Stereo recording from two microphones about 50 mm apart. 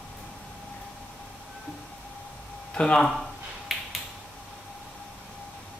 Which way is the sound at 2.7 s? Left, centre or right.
Centre.